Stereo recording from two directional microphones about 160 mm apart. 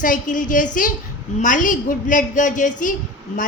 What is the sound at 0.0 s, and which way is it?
A woman's voice, 55° left (ahead or behind).